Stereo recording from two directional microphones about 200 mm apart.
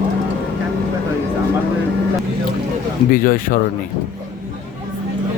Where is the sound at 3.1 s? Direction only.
45° left (ahead or behind).